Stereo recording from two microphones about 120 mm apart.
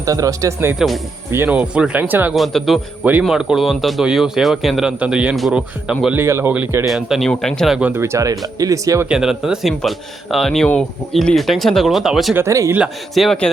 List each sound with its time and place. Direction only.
0.0 s speech: 30° right (ahead or behind)
2.3 s speech: centre (ahead or behind)
3.0 s speech: 10° right (ahead or behind)
3.2 s speech: centre (ahead or behind)
6.1 s speech: 20° right (ahead or behind)
6.8 s speech: centre (ahead or behind)
7.8 s speech: 10° right (ahead or behind)
8.0 s speech: 25° right (ahead or behind)
9.0 s speech: 5° right (ahead or behind)
12.3 s speech: 25° right (ahead or behind)
13.1 s speech: 5° left (ahead or behind)